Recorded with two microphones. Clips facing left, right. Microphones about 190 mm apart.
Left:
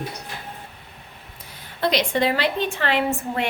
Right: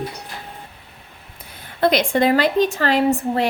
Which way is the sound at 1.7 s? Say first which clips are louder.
Right 4 dB; 50° right (ahead or behind).